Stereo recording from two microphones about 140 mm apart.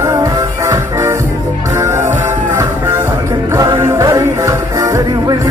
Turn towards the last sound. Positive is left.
turn(degrees=-25)  # may be behind; listen again after turning